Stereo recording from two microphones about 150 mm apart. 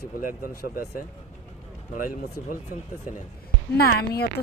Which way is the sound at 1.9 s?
65° left (ahead or behind).